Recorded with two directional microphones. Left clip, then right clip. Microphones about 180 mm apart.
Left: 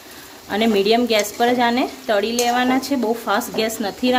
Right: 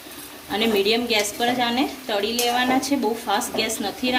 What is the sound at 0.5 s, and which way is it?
A woman's voice, 50° left (ahead or behind).